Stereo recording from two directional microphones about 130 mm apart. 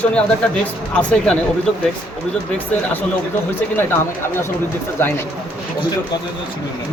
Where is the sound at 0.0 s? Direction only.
10° left (ahead or behind).